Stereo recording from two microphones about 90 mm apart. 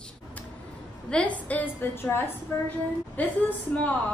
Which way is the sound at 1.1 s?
15° left (ahead or behind).